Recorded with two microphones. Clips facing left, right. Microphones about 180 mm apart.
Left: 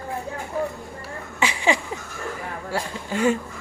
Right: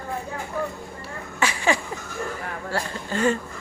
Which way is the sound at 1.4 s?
20° left (ahead or behind).